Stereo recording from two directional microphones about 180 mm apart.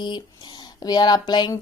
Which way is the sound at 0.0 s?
25° left (ahead or behind).